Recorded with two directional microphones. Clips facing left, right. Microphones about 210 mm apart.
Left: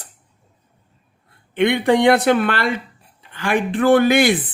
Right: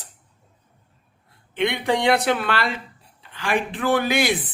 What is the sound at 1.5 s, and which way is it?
Speech, 55° left (ahead or behind).